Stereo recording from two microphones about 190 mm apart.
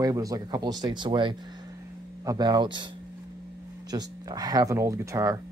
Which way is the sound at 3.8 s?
20° right (ahead or behind).